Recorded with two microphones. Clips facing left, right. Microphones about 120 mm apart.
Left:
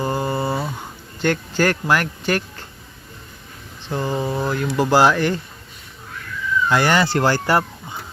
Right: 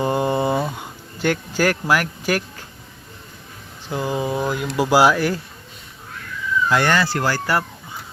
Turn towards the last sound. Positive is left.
turn(degrees=25)  # may be behind; listen again after turning